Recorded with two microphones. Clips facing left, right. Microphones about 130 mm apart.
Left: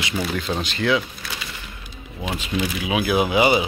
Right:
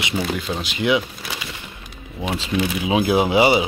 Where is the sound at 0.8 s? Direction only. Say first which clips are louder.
Right 2 dB; 20° right (ahead or behind).